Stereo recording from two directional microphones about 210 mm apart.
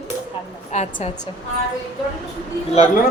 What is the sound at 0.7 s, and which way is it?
Speech, 35° left (ahead or behind).